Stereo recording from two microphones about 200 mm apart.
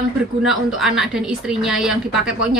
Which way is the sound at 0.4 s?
Centre (ahead or behind).